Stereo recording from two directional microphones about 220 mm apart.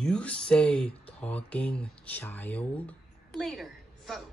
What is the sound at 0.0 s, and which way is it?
A woman's voice, 5° left (ahead or behind).